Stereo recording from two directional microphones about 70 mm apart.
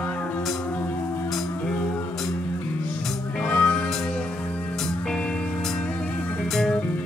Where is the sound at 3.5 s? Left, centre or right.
Centre.